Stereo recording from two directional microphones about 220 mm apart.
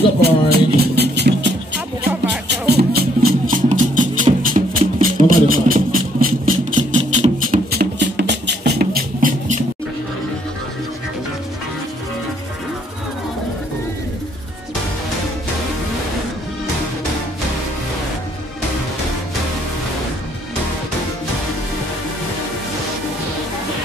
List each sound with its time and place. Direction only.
0.2 s music: 45° right (ahead or behind)
7.5 s music: 45° right (ahead or behind)